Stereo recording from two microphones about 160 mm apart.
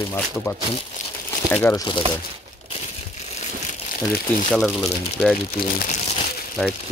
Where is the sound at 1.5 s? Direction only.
15° left (ahead or behind).